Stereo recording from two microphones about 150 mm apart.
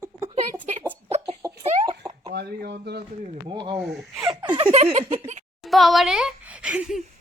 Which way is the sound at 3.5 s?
30° right (ahead or behind).